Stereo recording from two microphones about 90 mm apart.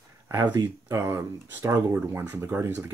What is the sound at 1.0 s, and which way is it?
Speech, 30° right (ahead or behind).